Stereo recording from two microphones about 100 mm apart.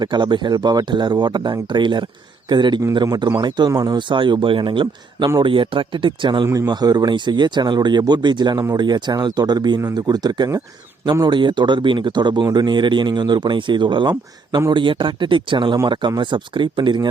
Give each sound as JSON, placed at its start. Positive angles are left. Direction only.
{"t": 0.0, "sound": "speech", "side_deg": -50}
{"t": 6.4, "sound": "speech", "side_deg": -35}